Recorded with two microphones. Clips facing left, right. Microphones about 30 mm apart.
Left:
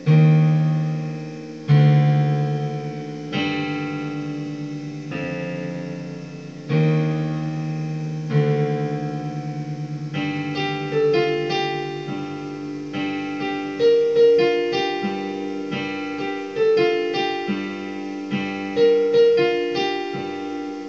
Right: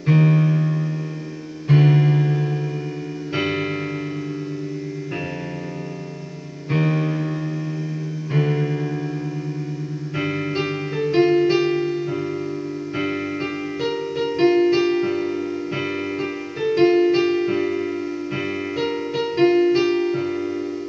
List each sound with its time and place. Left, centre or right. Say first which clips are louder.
0.0 s music: even; centre
6.9 s music: even; centre
10.1 s music: right 1 dB; centre
10.9 s music: left 5 dB; centre
11.1 s keyboard: right 4 dB; centre
11.5 s music: right 4 dB; left
13.0 s music: even; centre
14.3 s music: right 1 dB; left
16.6 s music: right 2 dB; centre
17.5 s music: right 5 dB; centre
19.5 s music: right 5 dB; centre